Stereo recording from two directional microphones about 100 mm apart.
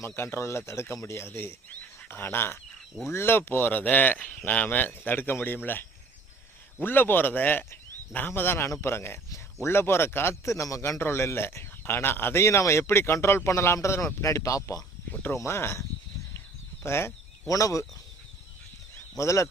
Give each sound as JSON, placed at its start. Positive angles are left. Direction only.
{"t": 0.0, "sound": "a man's voice", "side_deg": 25}
{"t": 6.7, "sound": "a man's voice", "side_deg": 20}
{"t": 15.1, "sound": "a man's voice", "side_deg": 15}
{"t": 16.8, "sound": "speech", "side_deg": 25}
{"t": 19.1, "sound": "speech", "side_deg": 30}